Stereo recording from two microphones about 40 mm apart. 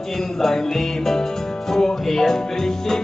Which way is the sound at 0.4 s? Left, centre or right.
Centre.